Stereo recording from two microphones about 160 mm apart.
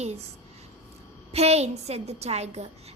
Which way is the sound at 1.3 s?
40° right (ahead or behind).